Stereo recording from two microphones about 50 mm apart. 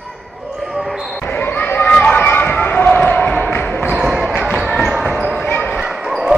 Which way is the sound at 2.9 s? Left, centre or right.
Left.